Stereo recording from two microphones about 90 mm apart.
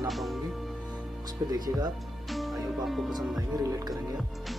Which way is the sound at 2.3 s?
Centre (ahead or behind).